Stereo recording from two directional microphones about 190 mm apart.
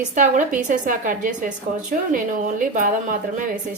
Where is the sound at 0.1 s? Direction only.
40° right (ahead or behind).